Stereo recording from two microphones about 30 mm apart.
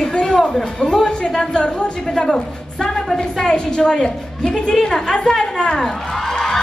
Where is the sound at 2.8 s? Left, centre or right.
Centre.